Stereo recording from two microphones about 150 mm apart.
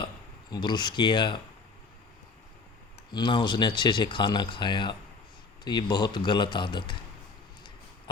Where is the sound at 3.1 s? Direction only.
30° left (ahead or behind).